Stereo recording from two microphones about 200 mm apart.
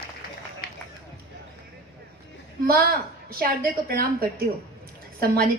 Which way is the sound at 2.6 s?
50° right (ahead or behind).